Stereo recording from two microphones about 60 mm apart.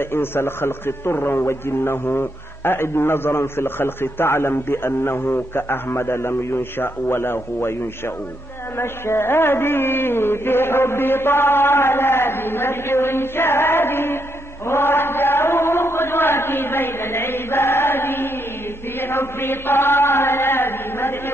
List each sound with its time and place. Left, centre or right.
0.1 s a man's voice: left
8.7 s a man's voice: left
14.7 s chant: left